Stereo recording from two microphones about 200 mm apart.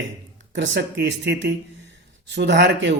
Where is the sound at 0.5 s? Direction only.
65° right (ahead or behind).